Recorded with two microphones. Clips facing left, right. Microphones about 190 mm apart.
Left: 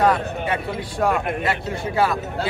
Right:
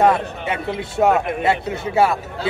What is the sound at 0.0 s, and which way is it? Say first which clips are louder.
A man's voice: right 2 dB; 25° right (ahead or behind).